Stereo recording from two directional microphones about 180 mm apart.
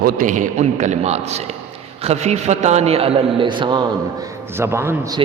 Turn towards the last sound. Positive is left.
turn(degrees=-15)  # may be behind; listen again after turning